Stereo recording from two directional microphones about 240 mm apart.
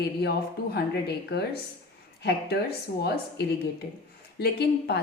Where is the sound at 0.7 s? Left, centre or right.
Left.